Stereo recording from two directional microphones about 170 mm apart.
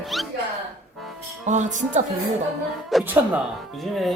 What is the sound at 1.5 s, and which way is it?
Music, 45° right (ahead or behind).